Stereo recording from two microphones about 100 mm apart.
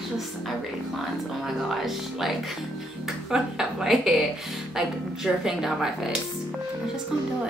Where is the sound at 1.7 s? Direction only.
Centre (ahead or behind).